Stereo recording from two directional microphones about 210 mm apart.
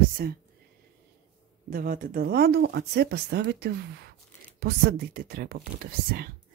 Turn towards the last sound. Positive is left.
turn(degrees=-45)  # may be behind; listen again after turning